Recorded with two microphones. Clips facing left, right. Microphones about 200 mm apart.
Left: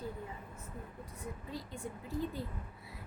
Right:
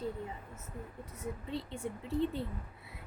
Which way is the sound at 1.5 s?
25° right (ahead or behind).